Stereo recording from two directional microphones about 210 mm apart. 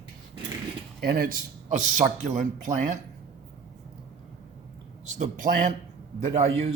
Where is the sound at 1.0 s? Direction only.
45° right (ahead or behind).